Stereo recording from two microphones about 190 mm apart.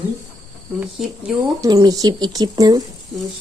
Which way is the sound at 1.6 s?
20° right (ahead or behind).